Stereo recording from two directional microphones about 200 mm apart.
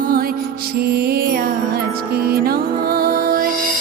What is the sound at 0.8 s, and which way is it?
Music, 50° right (ahead or behind).